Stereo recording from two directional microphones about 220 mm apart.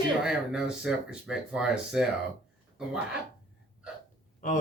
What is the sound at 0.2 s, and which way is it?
Speech, 5° right (ahead or behind).